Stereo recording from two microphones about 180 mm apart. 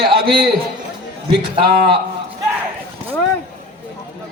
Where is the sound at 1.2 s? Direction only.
25° right (ahead or behind).